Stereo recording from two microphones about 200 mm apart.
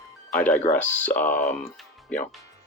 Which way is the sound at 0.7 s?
10° left (ahead or behind).